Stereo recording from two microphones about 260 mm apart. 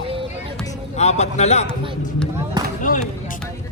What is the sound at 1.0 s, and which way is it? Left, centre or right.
Speech, left.